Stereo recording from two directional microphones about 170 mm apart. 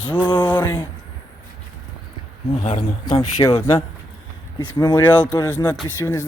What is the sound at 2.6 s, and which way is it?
Speech, 45° left (ahead or behind).